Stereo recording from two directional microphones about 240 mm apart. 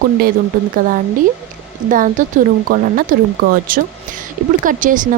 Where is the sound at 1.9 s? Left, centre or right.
Right.